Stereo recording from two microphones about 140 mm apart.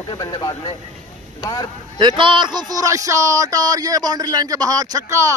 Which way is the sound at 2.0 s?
35° right (ahead or behind).